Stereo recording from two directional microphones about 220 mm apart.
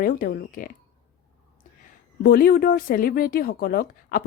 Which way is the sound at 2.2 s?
40° left (ahead or behind).